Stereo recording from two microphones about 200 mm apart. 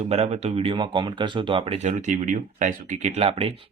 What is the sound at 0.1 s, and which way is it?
Speech, 30° right (ahead or behind).